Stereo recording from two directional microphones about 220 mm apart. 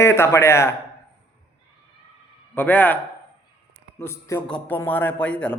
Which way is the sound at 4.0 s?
10° left (ahead or behind).